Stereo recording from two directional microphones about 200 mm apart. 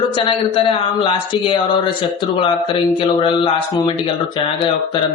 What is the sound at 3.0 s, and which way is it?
Speech, 25° left (ahead or behind).